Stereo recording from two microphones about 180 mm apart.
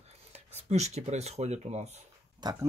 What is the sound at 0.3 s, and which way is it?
Speech, 40° right (ahead or behind).